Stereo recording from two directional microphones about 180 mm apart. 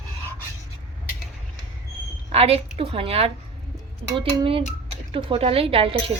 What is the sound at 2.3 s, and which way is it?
A woman's voice, 35° right (ahead or behind).